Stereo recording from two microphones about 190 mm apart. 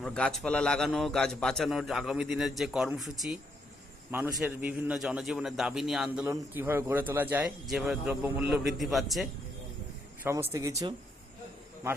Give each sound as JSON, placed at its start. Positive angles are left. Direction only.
{"t": 0.0, "sound": "a man's voice", "side_deg": 5}
{"t": 10.5, "sound": "speech", "side_deg": -15}